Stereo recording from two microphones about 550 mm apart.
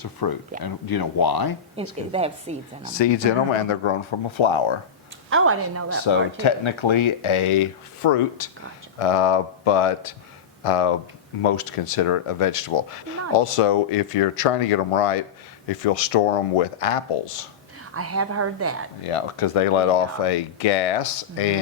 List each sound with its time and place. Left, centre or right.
0.0 s speech: left
1.7 s a woman's voice: centre
3.0 s speech: left
5.3 s a woman's voice: right
6.1 s speech: left
15.8 s speech: left
17.9 s a woman's voice: right
19.0 s speech: left